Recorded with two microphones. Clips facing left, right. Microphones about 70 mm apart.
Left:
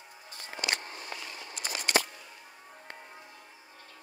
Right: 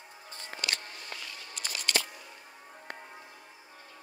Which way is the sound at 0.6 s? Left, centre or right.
Centre.